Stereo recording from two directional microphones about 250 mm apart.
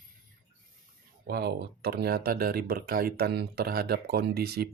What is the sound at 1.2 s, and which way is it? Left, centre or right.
Speech, right.